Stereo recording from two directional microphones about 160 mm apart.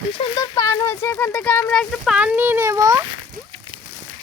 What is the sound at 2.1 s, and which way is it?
Speech, 10° right (ahead or behind).